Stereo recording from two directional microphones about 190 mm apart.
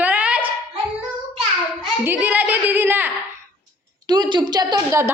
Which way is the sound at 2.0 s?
10° right (ahead or behind).